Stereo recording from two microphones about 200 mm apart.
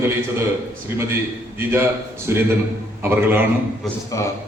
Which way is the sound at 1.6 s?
10° right (ahead or behind).